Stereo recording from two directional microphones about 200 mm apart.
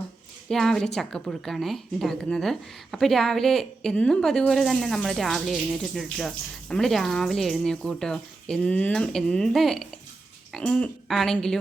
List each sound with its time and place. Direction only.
0.4 s speech: centre (ahead or behind)